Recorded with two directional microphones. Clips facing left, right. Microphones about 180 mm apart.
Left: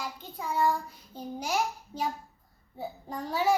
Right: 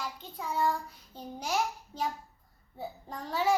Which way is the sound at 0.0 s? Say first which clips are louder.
Left 1 dB; centre (ahead or behind).